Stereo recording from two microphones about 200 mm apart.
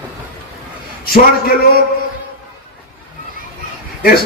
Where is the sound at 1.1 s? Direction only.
50° left (ahead or behind).